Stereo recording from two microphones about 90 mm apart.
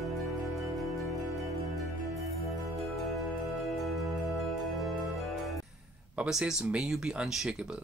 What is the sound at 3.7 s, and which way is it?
Music, centre (ahead or behind).